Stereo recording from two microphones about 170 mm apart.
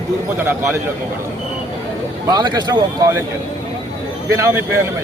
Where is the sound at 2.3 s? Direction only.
25° right (ahead or behind).